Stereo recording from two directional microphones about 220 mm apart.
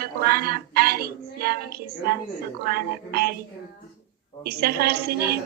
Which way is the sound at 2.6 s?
45° right (ahead or behind).